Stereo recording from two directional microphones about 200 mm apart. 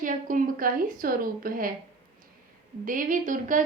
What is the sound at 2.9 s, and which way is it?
Speech, 40° right (ahead or behind).